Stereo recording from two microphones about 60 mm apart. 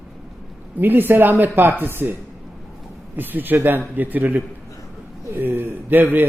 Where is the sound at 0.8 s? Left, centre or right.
Right.